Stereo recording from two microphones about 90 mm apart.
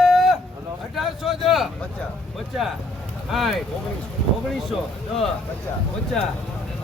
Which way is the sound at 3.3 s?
Centre (ahead or behind).